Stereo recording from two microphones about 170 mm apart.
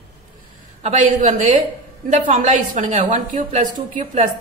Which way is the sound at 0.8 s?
45° right (ahead or behind).